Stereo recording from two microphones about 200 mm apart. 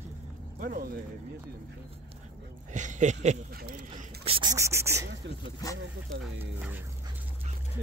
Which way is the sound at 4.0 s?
25° right (ahead or behind).